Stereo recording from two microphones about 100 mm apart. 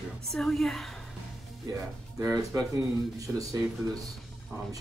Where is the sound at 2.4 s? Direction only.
30° right (ahead or behind).